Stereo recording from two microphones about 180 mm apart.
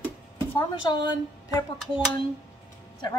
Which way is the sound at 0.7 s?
25° left (ahead or behind).